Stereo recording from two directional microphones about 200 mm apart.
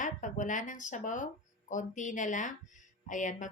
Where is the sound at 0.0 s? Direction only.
40° left (ahead or behind).